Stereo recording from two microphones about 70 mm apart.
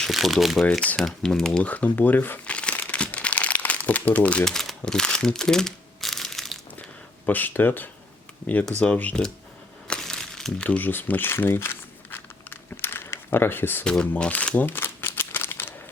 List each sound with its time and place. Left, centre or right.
0.0 s speech: centre
1.6 s speech: left
2.5 s crumpling: centre
4.4 s crumpling: centre
7.3 s speech: left
9.8 s crumpling: centre
10.7 s a sound: left
13.8 s speech: centre
14.1 s a sound: left